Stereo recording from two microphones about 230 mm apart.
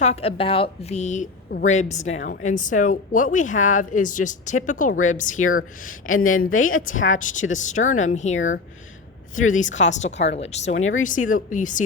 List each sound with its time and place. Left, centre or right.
0.0 s a woman's voice: left
5.4 s speech: left
7.5 s speech: left
8.4 s speech: left
9.5 s speech: left